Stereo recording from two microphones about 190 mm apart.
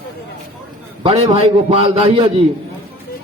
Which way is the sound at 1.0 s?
35° right (ahead or behind).